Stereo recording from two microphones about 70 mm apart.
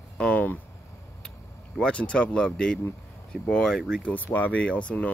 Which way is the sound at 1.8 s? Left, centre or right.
Centre.